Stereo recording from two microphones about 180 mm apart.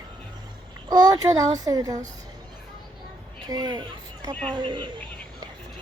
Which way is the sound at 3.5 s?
25° right (ahead or behind).